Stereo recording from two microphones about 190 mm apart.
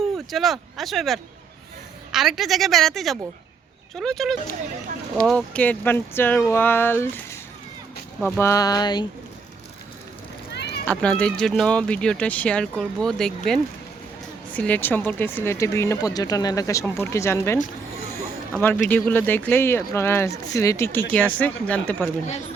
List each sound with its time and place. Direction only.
0.3 s speech: centre (ahead or behind); by 9.0 s 20° left (ahead or behind)
10.5 s a sound: 60° left (ahead or behind)
10.8 s speech: 5° left (ahead or behind)